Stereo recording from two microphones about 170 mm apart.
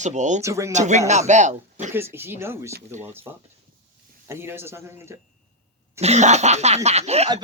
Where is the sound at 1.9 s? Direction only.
15° right (ahead or behind).